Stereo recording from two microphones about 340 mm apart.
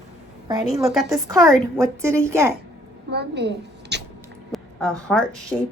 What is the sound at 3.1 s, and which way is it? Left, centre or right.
Speech, right.